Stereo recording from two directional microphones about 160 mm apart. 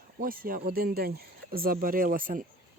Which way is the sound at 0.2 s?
60° right (ahead or behind).